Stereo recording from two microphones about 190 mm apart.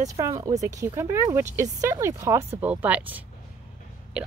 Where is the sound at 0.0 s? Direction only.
15° right (ahead or behind).